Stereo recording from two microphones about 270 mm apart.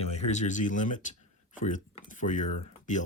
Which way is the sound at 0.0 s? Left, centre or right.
Left.